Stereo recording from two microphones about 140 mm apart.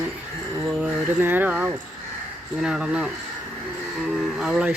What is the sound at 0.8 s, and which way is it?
Speech, 15° right (ahead or behind).